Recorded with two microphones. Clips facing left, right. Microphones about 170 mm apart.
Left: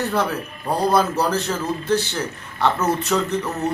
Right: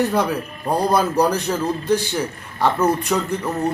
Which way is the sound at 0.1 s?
15° right (ahead or behind).